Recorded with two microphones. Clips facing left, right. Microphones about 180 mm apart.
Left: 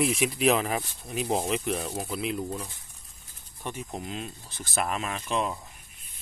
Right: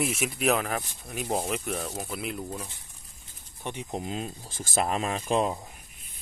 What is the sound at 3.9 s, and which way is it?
Speech, 35° right (ahead or behind).